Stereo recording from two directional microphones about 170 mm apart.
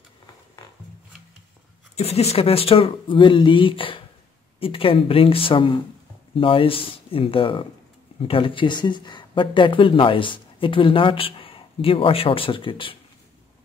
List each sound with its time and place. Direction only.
2.0 s speech: 40° left (ahead or behind)